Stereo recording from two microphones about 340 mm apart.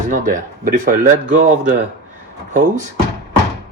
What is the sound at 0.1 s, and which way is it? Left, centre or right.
Speech, right.